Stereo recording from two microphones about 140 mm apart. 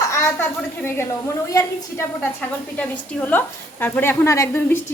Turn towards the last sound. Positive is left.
turn(degrees=20)  # may be behind; listen again after turning